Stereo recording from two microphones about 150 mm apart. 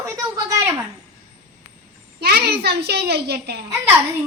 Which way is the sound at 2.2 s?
90° right.